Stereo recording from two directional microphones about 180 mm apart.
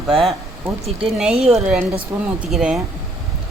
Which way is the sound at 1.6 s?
5° right (ahead or behind).